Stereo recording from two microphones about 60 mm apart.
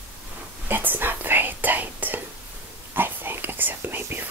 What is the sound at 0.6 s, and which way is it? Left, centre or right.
Whispering, right.